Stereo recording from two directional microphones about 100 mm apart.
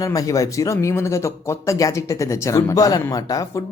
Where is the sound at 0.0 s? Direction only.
35° left (ahead or behind).